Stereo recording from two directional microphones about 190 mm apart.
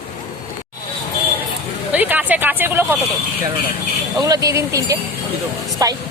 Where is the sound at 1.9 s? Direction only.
10° right (ahead or behind).